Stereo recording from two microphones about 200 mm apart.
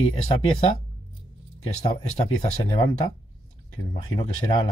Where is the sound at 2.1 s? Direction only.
35° left (ahead or behind).